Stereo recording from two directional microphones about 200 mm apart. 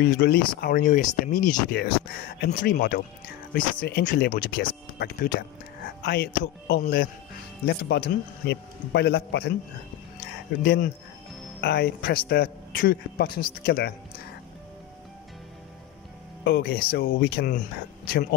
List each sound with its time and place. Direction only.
0.0 s a man's voice: 50° left (ahead or behind)
2.4 s a man's voice: 50° left (ahead or behind)
10.6 s a man's voice: 50° left (ahead or behind)
16.4 s a man's voice: 50° left (ahead or behind)